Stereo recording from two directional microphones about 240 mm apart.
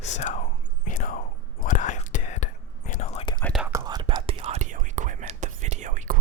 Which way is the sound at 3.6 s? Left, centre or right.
Centre.